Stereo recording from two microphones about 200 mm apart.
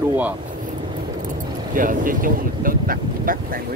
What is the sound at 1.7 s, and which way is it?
Speech, 40° right (ahead or behind).